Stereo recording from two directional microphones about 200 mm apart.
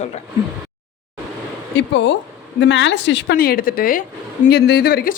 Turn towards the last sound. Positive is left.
turn(degrees=50)  # may be behind; listen again after turning